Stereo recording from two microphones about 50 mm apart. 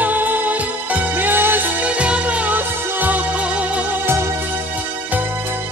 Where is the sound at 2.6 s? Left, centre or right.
Right.